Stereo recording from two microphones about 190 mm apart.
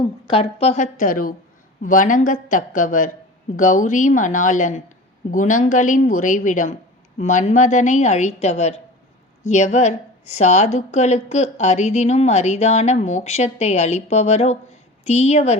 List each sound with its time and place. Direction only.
0.3 s a woman's voice: 30° left (ahead or behind)